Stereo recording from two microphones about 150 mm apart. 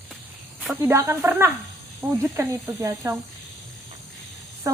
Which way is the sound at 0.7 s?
20° right (ahead or behind).